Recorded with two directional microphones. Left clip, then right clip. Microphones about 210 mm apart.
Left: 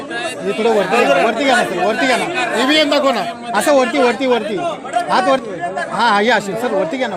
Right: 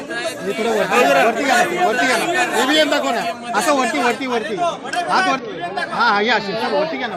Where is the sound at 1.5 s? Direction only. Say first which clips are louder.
Left 1 dB; 50° left (ahead or behind).